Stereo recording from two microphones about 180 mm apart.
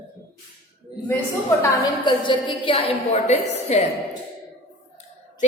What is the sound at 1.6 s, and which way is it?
A woman's voice, 25° left (ahead or behind).